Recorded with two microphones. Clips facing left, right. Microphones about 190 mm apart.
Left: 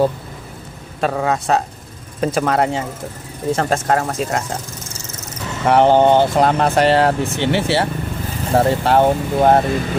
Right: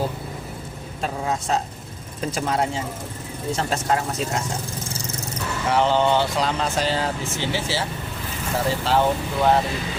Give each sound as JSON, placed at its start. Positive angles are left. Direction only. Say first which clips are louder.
{"t": 1.0, "sound": "speech", "louder": "left 7 dB", "side_deg": 70}
{"t": 3.5, "sound": "speech", "louder": "left 6 dB", "side_deg": 55}
{"t": 5.6, "sound": "speech", "louder": "left 8 dB", "side_deg": 55}